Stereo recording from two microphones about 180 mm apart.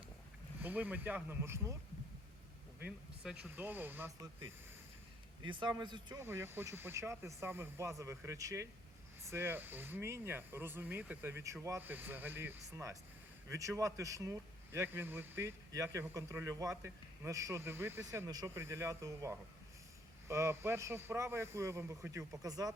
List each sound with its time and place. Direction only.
0.6 s speech: 10° right (ahead or behind)
3.2 s speech: 5° right (ahead or behind)
5.4 s speech: 25° right (ahead or behind)
6.1 s speech: 15° right (ahead or behind)